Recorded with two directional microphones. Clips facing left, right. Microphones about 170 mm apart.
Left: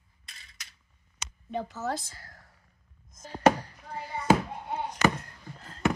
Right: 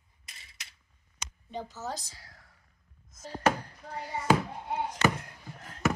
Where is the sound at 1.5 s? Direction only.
60° left (ahead or behind); by 2.5 s 40° left (ahead or behind).